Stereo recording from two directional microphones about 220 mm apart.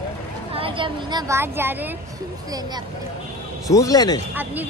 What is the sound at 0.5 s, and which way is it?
Speech, 25° right (ahead or behind).